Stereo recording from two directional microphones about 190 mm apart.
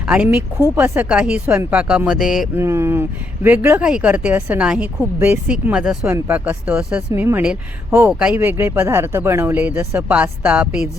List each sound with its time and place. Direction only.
0.1 s speech: 5° right (ahead or behind)
2.6 s speech: 15° right (ahead or behind)